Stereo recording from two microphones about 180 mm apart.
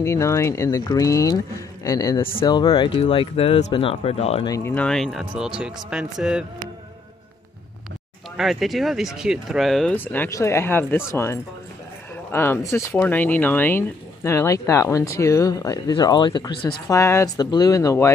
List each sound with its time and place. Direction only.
0.0 s speech: 15° left (ahead or behind); by 4.5 s 35° left (ahead or behind)
4.5 s speech: 10° left (ahead or behind)
8.4 s speech: centre (ahead or behind); by 18.1 s 15° left (ahead or behind)